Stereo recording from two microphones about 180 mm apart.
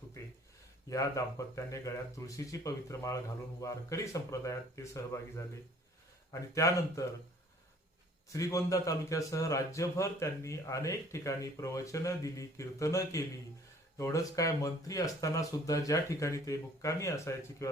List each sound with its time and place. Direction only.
0.9 s a man's voice: 20° left (ahead or behind)
6.5 s a man's voice: 20° left (ahead or behind)
8.3 s a man's voice: 15° left (ahead or behind)